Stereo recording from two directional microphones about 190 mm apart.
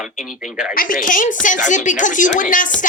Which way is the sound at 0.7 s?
45° left (ahead or behind).